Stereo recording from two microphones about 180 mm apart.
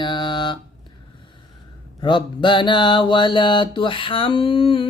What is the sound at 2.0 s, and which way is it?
Mantra, 25° left (ahead or behind).